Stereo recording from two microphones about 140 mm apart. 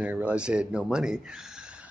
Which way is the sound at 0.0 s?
10° right (ahead or behind).